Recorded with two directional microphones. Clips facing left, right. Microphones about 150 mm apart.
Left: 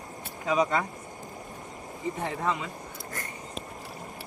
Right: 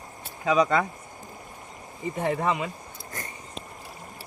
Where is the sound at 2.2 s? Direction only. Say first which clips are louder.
Right 6 dB; 70° right (ahead or behind).